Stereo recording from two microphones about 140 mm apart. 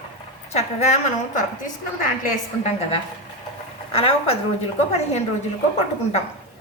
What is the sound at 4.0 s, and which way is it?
Speech, 45° left (ahead or behind).